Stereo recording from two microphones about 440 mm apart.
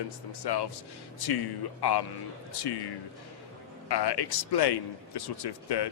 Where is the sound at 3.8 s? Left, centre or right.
Left.